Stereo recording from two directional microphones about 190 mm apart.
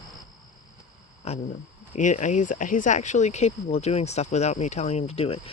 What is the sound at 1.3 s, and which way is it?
Speech, 35° left (ahead or behind).